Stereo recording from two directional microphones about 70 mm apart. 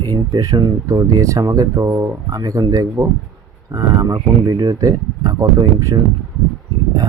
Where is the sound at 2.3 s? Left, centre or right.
Right.